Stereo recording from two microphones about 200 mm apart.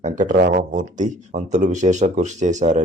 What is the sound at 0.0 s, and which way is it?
Speech, 40° right (ahead or behind).